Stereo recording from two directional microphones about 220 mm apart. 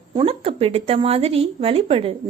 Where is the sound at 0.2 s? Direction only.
25° right (ahead or behind).